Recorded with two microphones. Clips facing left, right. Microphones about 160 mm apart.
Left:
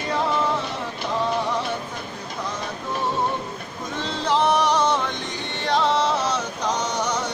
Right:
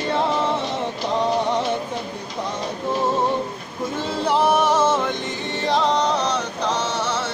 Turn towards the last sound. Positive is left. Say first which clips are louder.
# right 1 dB
turn(degrees=15)  # may be behind; listen again after turning